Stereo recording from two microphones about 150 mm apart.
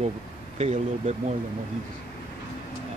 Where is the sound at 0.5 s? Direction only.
45° right (ahead or behind).